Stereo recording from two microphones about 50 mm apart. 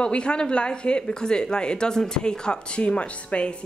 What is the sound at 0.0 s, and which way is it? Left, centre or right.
A woman's voice, left.